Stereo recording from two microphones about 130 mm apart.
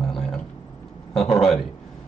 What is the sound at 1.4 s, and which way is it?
Speech, centre (ahead or behind).